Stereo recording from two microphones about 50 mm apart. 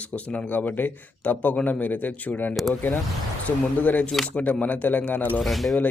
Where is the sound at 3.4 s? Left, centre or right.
Left.